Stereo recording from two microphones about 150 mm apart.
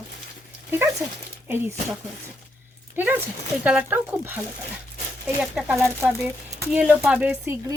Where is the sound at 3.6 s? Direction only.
10° right (ahead or behind).